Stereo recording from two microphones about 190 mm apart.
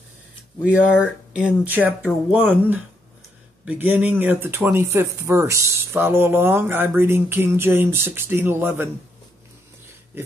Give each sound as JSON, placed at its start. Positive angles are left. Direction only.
{"t": 0.7, "sound": "speech", "side_deg": -5}